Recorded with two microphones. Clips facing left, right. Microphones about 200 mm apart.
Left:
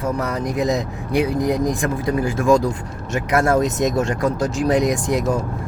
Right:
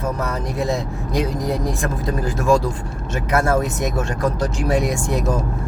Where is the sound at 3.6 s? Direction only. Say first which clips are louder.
Left 4 dB; 20° left (ahead or behind).